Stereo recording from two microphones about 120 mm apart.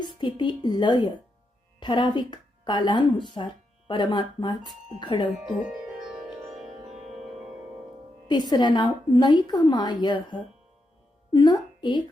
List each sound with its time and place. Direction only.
0.0 s a woman's voice: 40° left (ahead or behind)
8.3 s a woman's voice: 35° left (ahead or behind)